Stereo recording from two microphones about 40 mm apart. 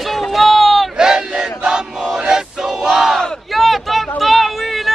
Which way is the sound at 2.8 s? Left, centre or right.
Centre.